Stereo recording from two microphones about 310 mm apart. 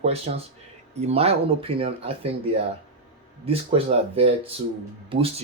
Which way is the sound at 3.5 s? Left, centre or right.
Centre.